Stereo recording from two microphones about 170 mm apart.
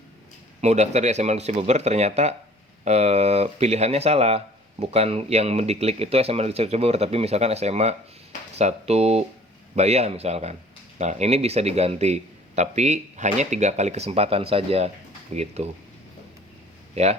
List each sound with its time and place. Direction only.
0.6 s speech: 40° right (ahead or behind)
16.9 s speech: 40° right (ahead or behind)